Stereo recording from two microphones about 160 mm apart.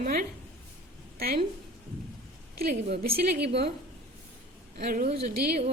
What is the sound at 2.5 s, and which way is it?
A woman's voice, 80° right.